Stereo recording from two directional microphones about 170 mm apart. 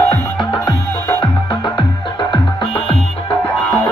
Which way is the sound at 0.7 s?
25° left (ahead or behind).